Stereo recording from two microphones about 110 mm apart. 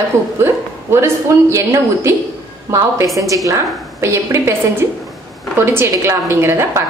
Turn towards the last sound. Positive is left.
turn(degrees=-25)  # may be behind; listen again after turning